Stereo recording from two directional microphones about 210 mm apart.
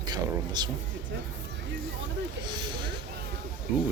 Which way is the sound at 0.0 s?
20° right (ahead or behind).